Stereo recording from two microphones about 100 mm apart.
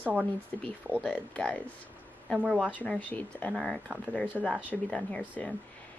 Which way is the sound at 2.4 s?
10° right (ahead or behind).